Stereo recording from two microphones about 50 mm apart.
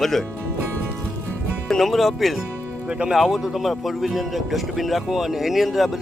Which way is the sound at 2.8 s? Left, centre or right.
Right.